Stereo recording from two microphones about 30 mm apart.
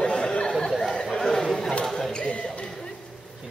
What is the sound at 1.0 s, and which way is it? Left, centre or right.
Chatter, centre.